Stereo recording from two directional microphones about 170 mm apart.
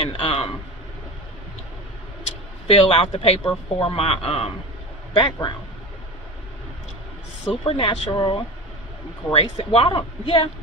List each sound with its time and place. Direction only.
0.0 s speech: 35° left (ahead or behind)
2.7 s speech: 35° left (ahead or behind)
7.6 s speech: 30° left (ahead or behind)